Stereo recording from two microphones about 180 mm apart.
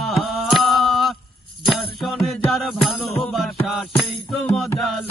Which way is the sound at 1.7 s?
Centre (ahead or behind).